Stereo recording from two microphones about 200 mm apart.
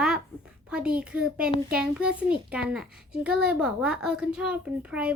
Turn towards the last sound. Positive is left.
turn(degrees=-5)  # may be behind; listen again after turning